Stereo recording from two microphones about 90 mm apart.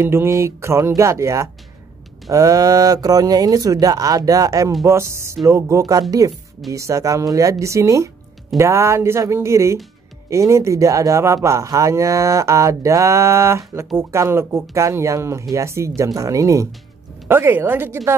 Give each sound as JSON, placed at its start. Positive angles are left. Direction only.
{"t": 0.0, "sound": "speech", "side_deg": -30}
{"t": 17.3, "sound": "a woman's voice", "side_deg": -25}